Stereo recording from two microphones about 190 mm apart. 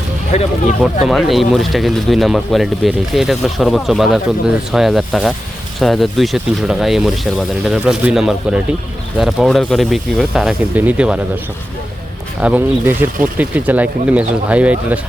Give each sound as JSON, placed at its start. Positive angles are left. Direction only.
{"t": 0.3, "sound": "speech", "side_deg": 35}
{"t": 1.0, "sound": "speech", "side_deg": 0}
{"t": 12.4, "sound": "speech", "side_deg": -10}